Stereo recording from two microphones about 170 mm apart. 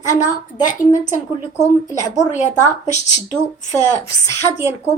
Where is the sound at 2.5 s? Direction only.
40° left (ahead or behind).